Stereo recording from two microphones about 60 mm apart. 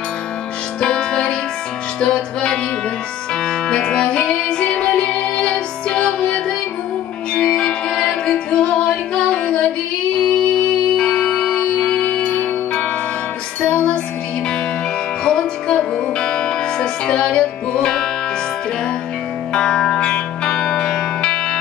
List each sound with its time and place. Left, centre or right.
0.7 s music: centre
11.0 s music: centre
15.2 s music: centre
19.5 s music: centre